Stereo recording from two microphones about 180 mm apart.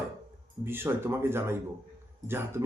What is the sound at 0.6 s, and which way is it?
A man's voice, 15° right (ahead or behind).